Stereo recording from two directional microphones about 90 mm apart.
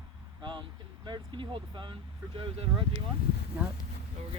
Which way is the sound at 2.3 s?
80° right.